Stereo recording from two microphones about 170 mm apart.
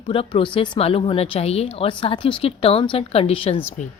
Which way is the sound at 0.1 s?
30° left (ahead or behind).